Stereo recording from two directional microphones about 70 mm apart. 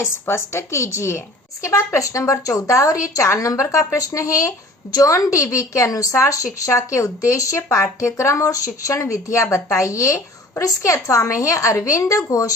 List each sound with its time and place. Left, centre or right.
0.0 s a woman's voice: left